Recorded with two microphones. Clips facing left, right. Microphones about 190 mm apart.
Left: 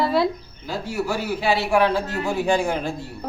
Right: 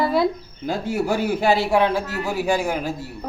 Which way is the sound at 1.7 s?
15° right (ahead or behind).